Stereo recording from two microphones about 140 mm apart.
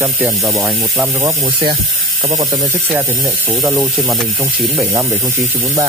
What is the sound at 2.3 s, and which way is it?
Speech, 25° right (ahead or behind).